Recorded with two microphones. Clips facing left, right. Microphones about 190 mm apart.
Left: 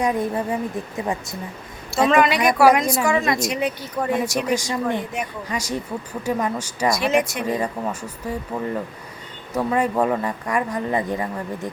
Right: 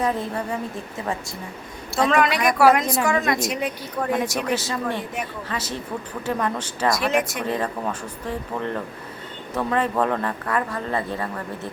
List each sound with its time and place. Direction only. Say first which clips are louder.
0.0 s speech: left 3 dB; 15° left (ahead or behind)
2.0 s speech: left 3 dB; centre (ahead or behind)
4.5 s speech: left 3 dB; 15° left (ahead or behind)
6.9 s speech: left 4 dB; centre (ahead or behind)
7.4 s speech: left 1 dB; 10° left (ahead or behind)